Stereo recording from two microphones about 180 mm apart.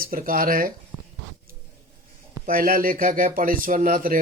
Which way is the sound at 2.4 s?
50° right (ahead or behind).